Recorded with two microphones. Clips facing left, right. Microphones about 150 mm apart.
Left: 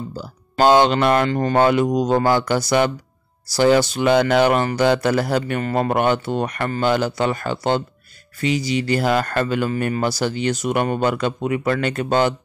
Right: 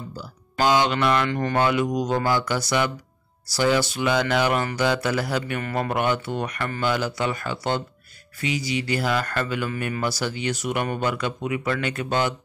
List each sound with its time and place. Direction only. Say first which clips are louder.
1.0 s speech: left 5 dB; 50° left (ahead or behind)
1.4 s speech: left 6 dB; 30° left (ahead or behind)
1.7 s speech: left 5 dB; 45° left (ahead or behind)
5.6 s speech: left 6 dB; 30° left (ahead or behind)
5.9 s speech: left 4 dB; 50° left (ahead or behind)